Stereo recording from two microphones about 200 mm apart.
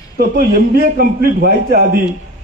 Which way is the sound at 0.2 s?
50° right (ahead or behind).